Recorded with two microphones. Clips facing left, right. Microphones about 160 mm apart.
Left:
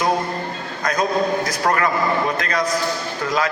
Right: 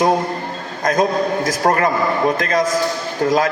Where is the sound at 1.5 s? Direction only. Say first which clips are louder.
Right 3 dB; 45° right (ahead or behind).